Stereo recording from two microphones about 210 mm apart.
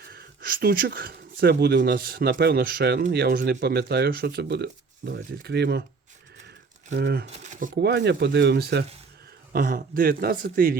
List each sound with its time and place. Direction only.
0.1 s speech: 45° right (ahead or behind)
6.9 s speech: 55° right (ahead or behind)
7.3 s a sound: 35° right (ahead or behind)
7.8 s speech: 55° right (ahead or behind)